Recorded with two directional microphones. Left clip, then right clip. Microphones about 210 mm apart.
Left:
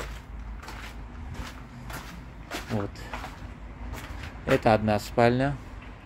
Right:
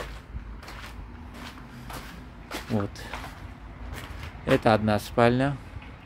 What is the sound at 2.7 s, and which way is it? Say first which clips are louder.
Speech: right 4 dB; 30° right (ahead or behind).